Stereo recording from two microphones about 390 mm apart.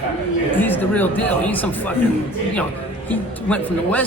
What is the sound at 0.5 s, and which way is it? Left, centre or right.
Speech, centre.